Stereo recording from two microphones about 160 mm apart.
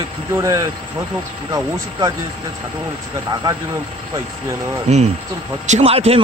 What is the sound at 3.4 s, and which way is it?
Speech, 25° right (ahead or behind).